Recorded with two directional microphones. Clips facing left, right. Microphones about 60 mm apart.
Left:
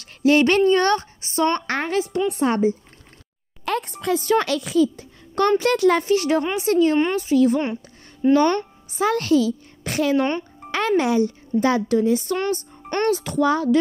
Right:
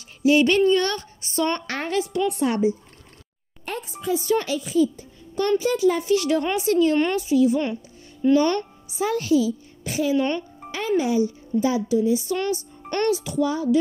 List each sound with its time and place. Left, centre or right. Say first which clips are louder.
0.0 s a woman's voice: left 1 dB; left
3.6 s a child's voice: left 5 dB; left
6.0 s a woman's voice: left 1 dB; left
7.2 s a child's voice: left 1 dB; left
7.6 s music: left 1 dB; left
9.0 s a woman's voice: left 2 dB; left